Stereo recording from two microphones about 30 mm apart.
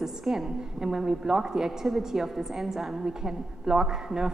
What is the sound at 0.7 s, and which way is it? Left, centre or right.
A woman's voice, right.